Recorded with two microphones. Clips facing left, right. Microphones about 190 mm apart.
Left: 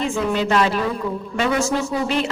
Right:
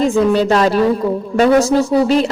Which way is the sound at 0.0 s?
40° right (ahead or behind).